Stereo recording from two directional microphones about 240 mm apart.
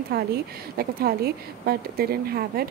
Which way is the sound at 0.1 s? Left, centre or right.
Right.